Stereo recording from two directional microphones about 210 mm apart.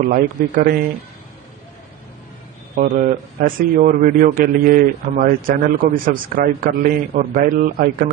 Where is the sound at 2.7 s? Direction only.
40° right (ahead or behind).